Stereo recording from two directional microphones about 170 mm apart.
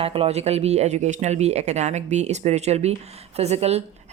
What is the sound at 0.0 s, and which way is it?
Speech, 35° right (ahead or behind).